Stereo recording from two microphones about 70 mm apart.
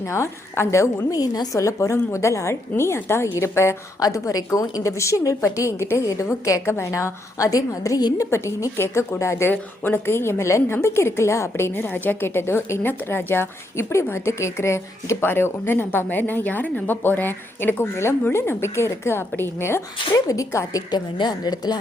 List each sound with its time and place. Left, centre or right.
0.0 s a woman's voice: left
1.2 s a woman's voice: left
1.5 s a woman's voice: left
4.0 s a woman's voice: left
9.5 s a woman's voice: left
15.3 s a woman's voice: left
20.1 s a woman's voice: left
20.9 s speech: left